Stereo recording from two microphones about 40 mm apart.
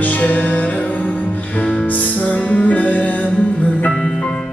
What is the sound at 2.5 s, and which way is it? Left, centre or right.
Music, left.